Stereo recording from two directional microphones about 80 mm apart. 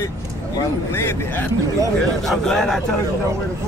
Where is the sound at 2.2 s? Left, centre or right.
Centre.